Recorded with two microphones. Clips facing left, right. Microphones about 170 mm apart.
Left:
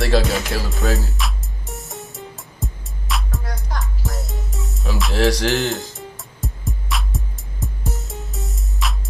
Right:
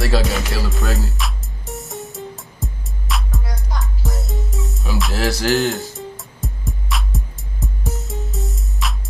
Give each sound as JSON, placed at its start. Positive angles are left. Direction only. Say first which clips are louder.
{"t": 0.0, "sound": "music", "louder": "left 1 dB", "side_deg": 0}